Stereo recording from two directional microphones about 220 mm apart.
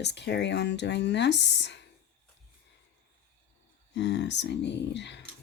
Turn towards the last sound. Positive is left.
turn(degrees=50)  # may be behind; listen again after turning